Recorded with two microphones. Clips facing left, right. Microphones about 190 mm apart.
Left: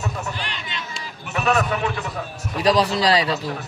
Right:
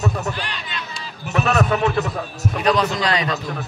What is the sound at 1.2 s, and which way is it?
Speech, 40° right (ahead or behind).